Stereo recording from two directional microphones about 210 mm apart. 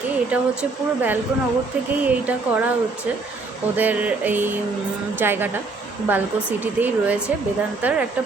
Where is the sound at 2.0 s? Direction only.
5° right (ahead or behind).